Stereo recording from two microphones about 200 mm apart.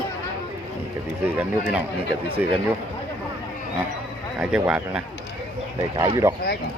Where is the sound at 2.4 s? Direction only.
5° right (ahead or behind).